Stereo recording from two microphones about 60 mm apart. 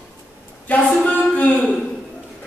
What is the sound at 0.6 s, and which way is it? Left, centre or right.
Speech, left.